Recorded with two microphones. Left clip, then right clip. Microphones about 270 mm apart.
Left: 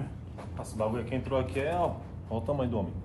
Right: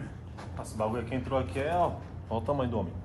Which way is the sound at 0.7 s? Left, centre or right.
Centre.